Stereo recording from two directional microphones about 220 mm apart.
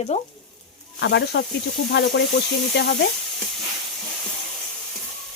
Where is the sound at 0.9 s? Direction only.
55° left (ahead or behind).